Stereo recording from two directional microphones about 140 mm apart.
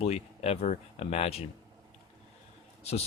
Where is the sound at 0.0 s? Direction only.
45° left (ahead or behind).